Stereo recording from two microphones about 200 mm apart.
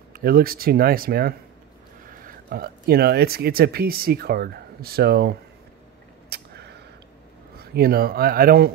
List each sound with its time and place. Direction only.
0.1 s speech: 50° right (ahead or behind)
6.3 s a sound: 55° right (ahead or behind)
7.5 s speech: 50° right (ahead or behind)